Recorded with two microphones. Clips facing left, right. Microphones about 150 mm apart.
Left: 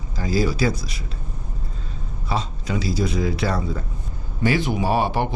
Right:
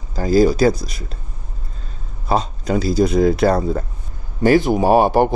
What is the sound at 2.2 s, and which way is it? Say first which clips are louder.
Speech: right 7 dB; 45° right (ahead or behind).